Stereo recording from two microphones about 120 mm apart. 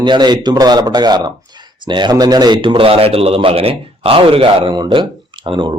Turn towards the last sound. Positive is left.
turn(degrees=-40)  # may be behind; listen again after turning